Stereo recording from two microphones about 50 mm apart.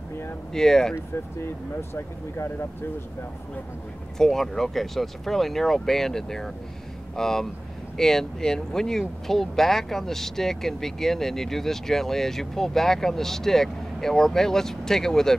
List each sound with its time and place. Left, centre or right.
0.5 s speech: centre
0.9 s speech: left
4.2 s speech: centre